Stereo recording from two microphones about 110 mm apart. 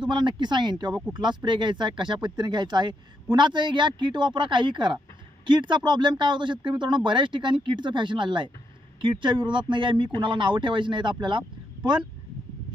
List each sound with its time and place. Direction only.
0.1 s speech: 45° right (ahead or behind)